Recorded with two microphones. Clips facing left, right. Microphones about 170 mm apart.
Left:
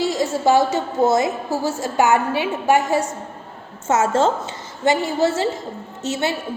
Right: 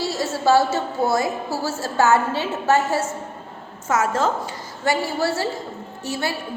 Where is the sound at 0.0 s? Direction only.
15° left (ahead or behind).